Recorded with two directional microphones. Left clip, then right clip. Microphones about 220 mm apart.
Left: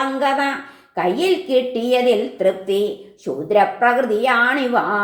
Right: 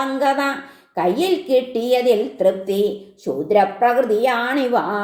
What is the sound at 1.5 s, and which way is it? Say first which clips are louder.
A woman's voice: even; 30° right (ahead or behind).